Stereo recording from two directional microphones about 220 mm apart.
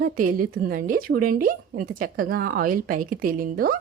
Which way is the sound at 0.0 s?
40° right (ahead or behind).